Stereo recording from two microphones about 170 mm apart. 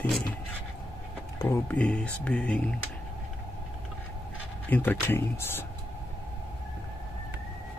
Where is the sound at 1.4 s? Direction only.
15° left (ahead or behind).